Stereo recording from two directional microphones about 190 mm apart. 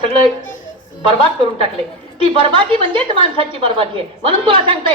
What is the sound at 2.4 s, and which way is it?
A man's voice, 25° right (ahead or behind).